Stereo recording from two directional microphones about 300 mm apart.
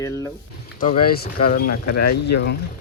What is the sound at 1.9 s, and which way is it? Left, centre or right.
Speech, left.